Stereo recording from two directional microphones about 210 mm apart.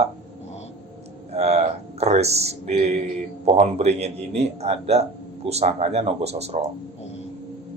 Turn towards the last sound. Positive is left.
turn(degrees=-30)  # may be behind; listen again after turning